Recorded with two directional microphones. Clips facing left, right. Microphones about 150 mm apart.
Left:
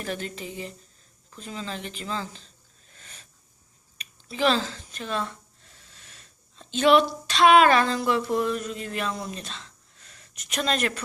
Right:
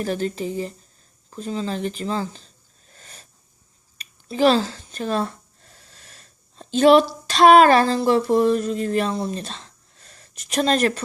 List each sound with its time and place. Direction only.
0.0 s speech: 35° right (ahead or behind)
2.9 s wheeze: 35° right (ahead or behind)
3.9 s speech: 35° right (ahead or behind)